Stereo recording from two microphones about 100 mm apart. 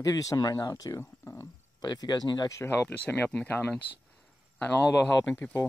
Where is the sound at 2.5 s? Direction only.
25° left (ahead or behind).